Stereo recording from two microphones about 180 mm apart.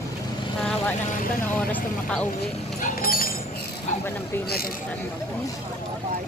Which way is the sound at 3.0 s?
55° left (ahead or behind).